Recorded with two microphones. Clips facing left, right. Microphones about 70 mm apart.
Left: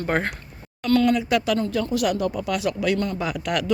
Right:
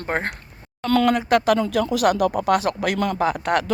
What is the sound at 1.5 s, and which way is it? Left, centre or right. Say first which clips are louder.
Speech: right 3 dB; right.